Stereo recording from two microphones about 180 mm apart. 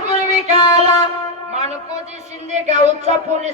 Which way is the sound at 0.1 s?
40° right (ahead or behind).